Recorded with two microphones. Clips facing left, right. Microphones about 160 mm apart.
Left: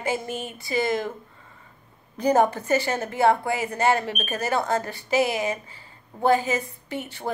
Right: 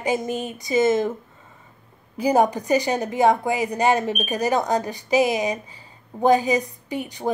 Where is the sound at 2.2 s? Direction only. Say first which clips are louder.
Right 1 dB; 10° right (ahead or behind).